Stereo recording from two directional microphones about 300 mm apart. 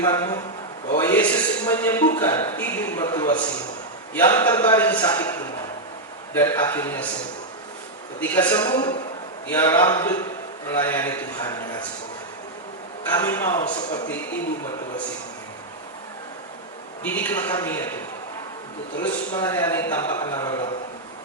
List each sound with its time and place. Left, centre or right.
0.0 s a man's voice: centre
6.3 s a man's voice: centre
8.2 s a man's voice: centre
13.1 s a man's voice: centre
17.0 s a man's voice: centre
19.0 s a man's voice: centre